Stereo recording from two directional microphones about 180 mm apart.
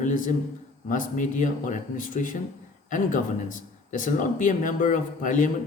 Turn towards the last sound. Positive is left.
turn(degrees=45)  # may be behind; listen again after turning